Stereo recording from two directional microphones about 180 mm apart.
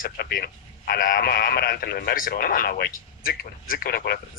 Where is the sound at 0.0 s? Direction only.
60° left (ahead or behind).